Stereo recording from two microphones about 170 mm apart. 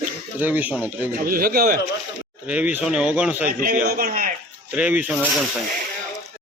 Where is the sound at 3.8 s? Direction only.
65° right (ahead or behind).